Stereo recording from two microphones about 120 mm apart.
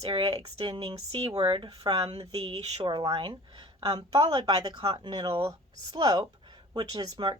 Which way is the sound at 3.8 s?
35° right (ahead or behind).